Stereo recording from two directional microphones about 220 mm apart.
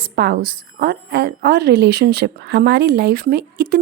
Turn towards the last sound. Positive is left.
turn(degrees=-45)  # may be behind; listen again after turning